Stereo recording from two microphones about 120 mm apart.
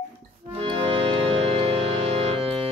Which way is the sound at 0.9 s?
55° right (ahead or behind).